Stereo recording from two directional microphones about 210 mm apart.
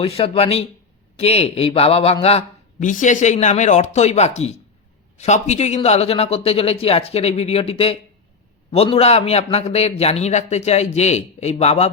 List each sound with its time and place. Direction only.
0.0 s a man's voice: 25° left (ahead or behind)